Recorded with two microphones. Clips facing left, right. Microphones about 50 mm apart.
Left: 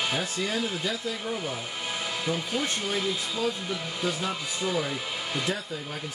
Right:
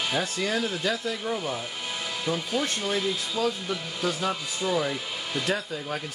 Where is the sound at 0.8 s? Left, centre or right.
Right.